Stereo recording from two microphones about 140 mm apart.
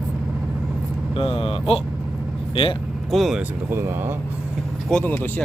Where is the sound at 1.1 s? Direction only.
40° left (ahead or behind).